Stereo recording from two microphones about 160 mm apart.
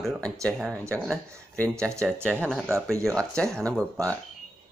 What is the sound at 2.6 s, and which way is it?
Speech, 15° right (ahead or behind).